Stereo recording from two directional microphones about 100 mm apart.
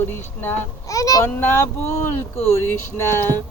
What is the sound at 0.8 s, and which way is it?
Speech, 35° left (ahead or behind).